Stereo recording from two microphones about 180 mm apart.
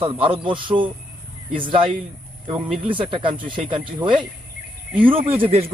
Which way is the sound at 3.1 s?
30° right (ahead or behind).